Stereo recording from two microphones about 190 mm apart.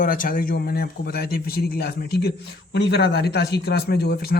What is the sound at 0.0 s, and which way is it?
A man's voice, 45° left (ahead or behind).